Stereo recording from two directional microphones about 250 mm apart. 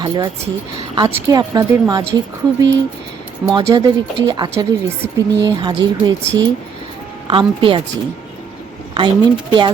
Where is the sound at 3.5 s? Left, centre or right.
Centre.